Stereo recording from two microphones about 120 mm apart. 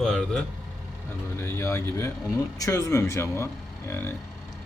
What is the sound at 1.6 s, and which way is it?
Speech, 25° left (ahead or behind).